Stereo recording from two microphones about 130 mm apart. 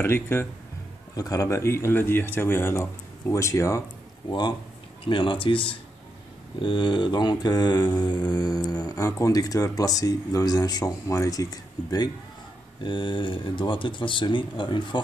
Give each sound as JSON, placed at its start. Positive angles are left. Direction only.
{"t": 0.0, "sound": "speech", "side_deg": 15}
{"t": 4.3, "sound": "mantra", "side_deg": 35}